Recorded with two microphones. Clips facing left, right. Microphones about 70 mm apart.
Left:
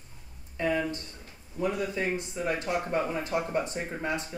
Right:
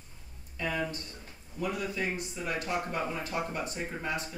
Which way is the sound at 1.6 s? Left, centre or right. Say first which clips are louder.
Left 4 dB; left.